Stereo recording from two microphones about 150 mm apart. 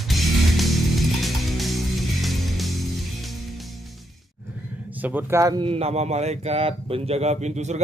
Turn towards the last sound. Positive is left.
turn(degrees=-50)  # may be behind; listen again after turning